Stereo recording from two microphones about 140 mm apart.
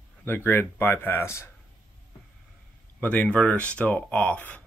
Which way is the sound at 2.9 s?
10° left (ahead or behind).